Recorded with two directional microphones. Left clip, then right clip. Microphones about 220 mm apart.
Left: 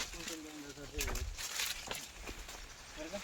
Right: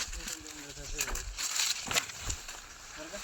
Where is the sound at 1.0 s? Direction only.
45° right (ahead or behind).